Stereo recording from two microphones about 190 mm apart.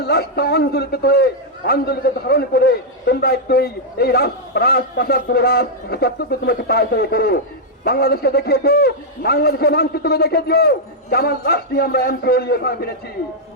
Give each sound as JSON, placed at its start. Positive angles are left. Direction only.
{"t": 0.0, "sound": "a man's voice", "side_deg": 55}